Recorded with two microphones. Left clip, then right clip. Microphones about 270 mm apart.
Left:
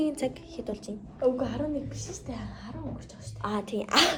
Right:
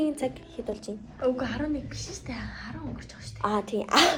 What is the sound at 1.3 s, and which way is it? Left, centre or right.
A woman's voice, left.